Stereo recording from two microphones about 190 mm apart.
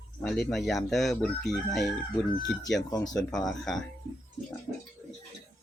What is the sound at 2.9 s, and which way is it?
Speech, 20° left (ahead or behind).